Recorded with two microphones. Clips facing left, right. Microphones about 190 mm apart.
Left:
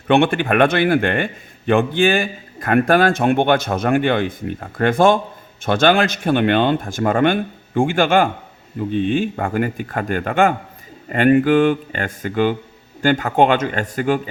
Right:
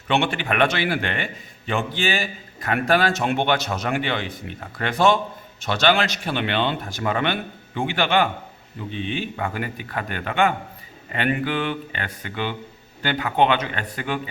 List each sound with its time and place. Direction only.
0.1 s a man's voice: 55° left (ahead or behind)